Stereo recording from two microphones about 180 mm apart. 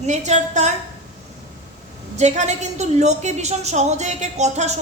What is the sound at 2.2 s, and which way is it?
A woman's voice, 40° right (ahead or behind).